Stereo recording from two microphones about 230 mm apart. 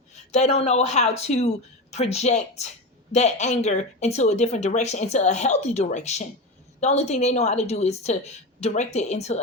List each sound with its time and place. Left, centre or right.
0.3 s speech: left